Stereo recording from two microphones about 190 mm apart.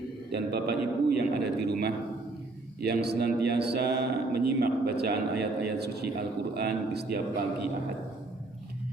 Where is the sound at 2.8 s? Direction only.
60° right (ahead or behind).